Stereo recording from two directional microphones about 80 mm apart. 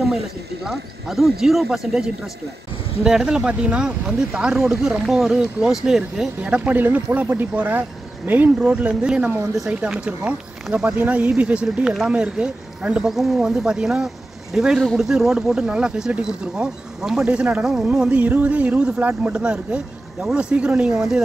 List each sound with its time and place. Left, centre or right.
0.7 s speech: centre
6.4 s speech: centre